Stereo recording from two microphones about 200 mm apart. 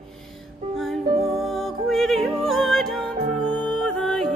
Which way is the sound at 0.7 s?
Centre (ahead or behind).